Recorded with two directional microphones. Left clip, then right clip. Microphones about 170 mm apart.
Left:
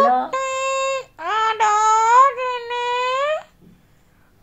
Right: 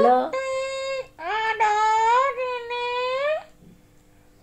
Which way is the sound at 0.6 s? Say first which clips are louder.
Left 7 dB; 40° left (ahead or behind).